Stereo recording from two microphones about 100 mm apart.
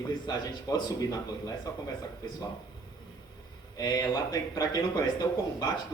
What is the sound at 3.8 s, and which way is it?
Speech, 40° left (ahead or behind).